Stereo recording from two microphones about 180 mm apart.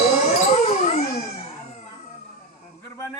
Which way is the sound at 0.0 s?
35° left (ahead or behind).